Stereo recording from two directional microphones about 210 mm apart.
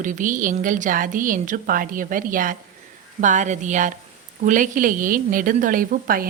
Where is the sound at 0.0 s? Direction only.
40° right (ahead or behind).